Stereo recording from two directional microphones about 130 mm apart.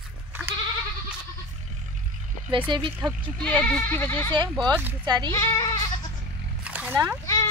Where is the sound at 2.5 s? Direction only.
40° right (ahead or behind).